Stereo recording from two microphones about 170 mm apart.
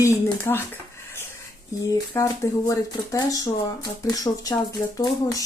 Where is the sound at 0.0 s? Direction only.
20° left (ahead or behind).